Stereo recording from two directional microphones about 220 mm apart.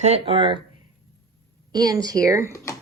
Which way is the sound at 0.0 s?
25° right (ahead or behind).